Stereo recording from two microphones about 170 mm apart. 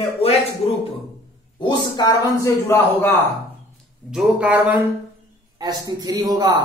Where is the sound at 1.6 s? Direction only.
25° left (ahead or behind).